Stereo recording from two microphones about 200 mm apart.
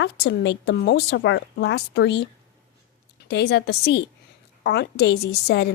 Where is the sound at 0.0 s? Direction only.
60° left (ahead or behind).